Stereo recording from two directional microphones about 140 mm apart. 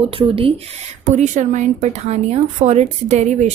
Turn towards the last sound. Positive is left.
turn(degrees=-55)  # may be behind; listen again after turning